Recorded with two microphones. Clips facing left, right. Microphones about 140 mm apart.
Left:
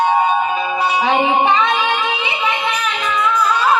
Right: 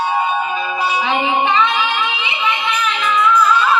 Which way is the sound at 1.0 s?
45° left (ahead or behind).